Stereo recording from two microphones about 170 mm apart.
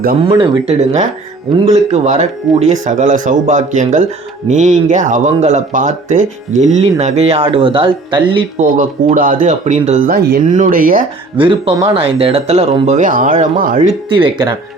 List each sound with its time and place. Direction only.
0.2 s speech: 30° right (ahead or behind)
1.6 s speech: 40° right (ahead or behind)
8.5 s speech: 50° right (ahead or behind)
11.3 s speech: 30° right (ahead or behind); by 13.9 s 50° right (ahead or behind)
14.1 s speech: 30° right (ahead or behind)